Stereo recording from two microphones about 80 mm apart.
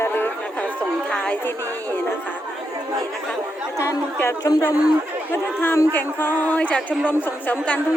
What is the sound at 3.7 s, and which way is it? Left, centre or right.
Speech, left.